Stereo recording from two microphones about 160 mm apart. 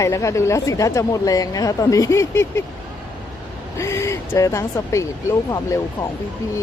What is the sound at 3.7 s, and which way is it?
Speech, 15° left (ahead or behind).